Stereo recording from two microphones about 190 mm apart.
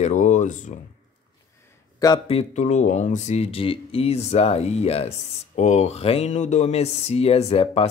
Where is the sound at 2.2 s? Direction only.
35° left (ahead or behind).